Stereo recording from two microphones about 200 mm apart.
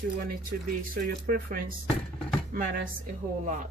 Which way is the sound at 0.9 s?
45° right (ahead or behind).